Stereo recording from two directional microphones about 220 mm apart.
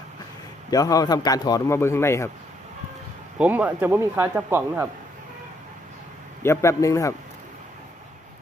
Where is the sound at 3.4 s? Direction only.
5° right (ahead or behind).